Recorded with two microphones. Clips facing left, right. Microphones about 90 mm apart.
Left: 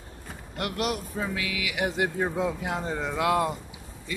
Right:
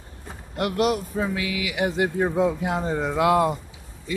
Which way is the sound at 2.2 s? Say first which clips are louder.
Right 6 dB; 10° right (ahead or behind).